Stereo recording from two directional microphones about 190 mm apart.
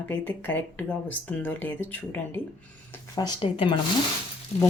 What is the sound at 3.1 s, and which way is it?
Speech, 25° left (ahead or behind).